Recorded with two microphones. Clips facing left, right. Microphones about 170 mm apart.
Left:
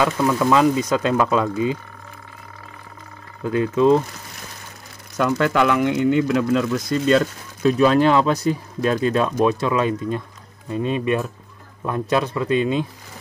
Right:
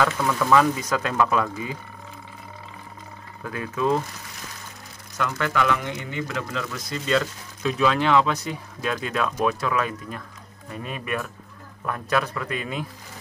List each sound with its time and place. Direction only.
0.0 s speech: 15° left (ahead or behind)
3.4 s speech: 25° left (ahead or behind)
5.1 s speech: 60° left (ahead or behind); by 12.8 s 25° left (ahead or behind)